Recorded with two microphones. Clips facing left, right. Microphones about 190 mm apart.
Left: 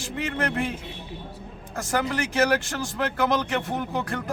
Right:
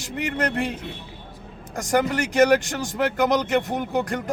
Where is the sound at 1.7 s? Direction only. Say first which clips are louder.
Right 4 dB; 15° right (ahead or behind).